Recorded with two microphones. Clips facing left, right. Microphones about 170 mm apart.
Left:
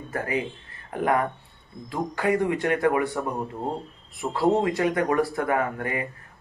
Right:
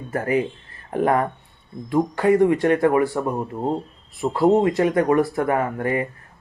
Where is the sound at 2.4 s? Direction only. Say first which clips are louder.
Right 6 dB; 25° right (ahead or behind).